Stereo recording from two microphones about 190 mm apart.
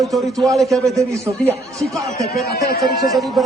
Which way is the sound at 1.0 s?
15° right (ahead or behind).